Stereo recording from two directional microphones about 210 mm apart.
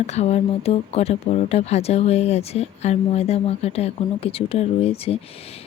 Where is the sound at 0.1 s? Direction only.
30° left (ahead or behind).